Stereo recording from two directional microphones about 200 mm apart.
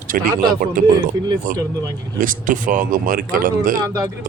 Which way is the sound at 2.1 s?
40° right (ahead or behind).